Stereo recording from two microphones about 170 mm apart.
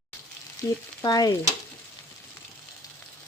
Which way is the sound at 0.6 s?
20° left (ahead or behind).